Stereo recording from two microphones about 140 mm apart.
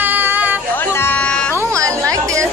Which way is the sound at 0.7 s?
15° left (ahead or behind).